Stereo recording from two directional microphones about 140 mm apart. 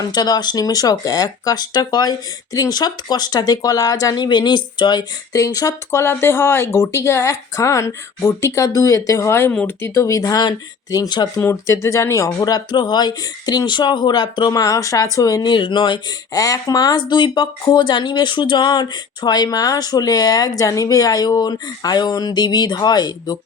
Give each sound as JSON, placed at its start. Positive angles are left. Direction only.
{"t": 0.0, "sound": "speech", "side_deg": 30}